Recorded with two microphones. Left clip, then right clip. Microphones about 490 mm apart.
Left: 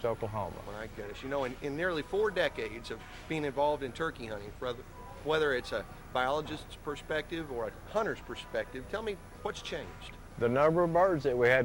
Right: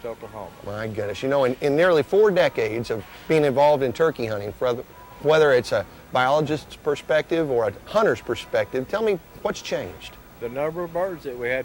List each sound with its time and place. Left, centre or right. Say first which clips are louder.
0.8 s speech: right 14 dB; right
10.4 s speech: left 1 dB; left